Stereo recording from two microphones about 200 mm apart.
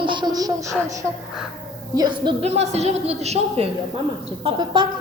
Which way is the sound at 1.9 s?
20° right (ahead or behind).